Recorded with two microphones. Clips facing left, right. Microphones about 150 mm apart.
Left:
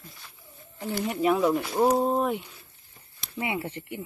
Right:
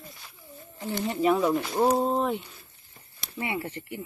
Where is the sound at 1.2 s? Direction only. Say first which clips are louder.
Even; centre (ahead or behind).